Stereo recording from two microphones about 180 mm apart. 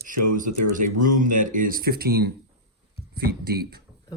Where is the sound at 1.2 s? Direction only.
45° right (ahead or behind).